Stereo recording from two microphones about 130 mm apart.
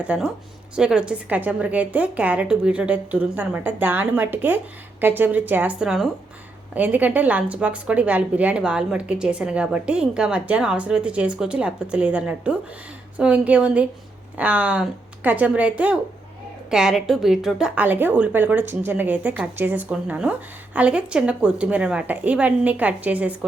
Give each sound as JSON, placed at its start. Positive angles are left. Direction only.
{"t": 0.0, "sound": "a woman's voice", "side_deg": -10}